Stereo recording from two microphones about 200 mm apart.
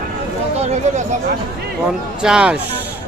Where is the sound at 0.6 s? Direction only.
35° right (ahead or behind).